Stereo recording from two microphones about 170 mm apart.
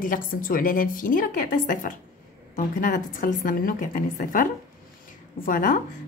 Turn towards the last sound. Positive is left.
turn(degrees=55)  # may be behind; listen again after turning